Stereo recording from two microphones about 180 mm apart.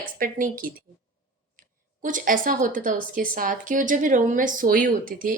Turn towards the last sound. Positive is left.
turn(degrees=-50)  # may be behind; listen again after turning